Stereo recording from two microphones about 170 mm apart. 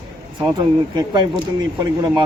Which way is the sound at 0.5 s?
25° right (ahead or behind).